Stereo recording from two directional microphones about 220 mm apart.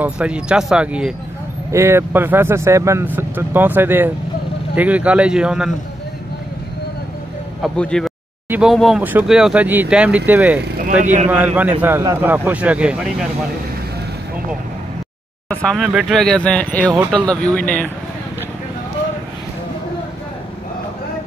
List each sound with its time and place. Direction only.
0.0 s speech: 5° right (ahead or behind)
7.6 s speech: 5° left (ahead or behind)
10.6 s speech: 35° right (ahead or behind)
11.2 s speech: 5° right (ahead or behind)
15.4 s speech: 5° left (ahead or behind)